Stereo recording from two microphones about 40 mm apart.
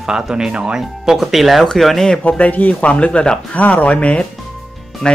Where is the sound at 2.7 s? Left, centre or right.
Left.